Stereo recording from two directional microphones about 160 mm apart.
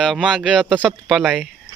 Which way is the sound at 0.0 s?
Centre (ahead or behind).